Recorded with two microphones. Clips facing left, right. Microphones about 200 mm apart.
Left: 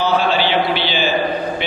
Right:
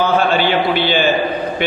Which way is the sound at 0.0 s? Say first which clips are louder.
Right 2 dB; 50° right (ahead or behind).